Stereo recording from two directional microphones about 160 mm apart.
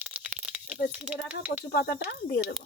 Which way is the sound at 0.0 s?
10° right (ahead or behind).